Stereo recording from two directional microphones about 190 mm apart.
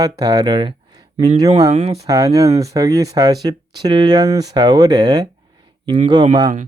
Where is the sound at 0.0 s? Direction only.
20° right (ahead or behind).